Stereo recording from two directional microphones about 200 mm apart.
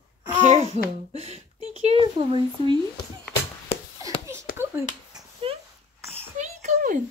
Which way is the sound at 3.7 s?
30° left (ahead or behind).